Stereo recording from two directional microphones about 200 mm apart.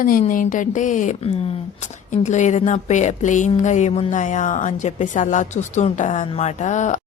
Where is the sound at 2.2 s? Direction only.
35° left (ahead or behind).